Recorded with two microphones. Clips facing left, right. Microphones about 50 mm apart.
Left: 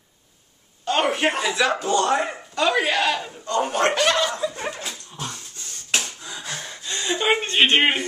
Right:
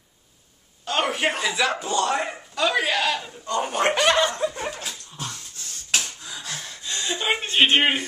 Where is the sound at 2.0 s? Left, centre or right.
Centre.